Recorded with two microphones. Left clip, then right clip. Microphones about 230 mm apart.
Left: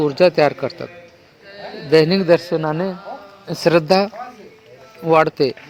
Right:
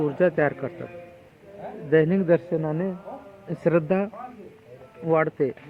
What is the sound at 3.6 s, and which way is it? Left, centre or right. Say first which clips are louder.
A man's voice: left 8 dB; left.